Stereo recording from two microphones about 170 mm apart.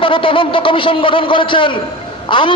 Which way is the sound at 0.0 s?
30° left (ahead or behind).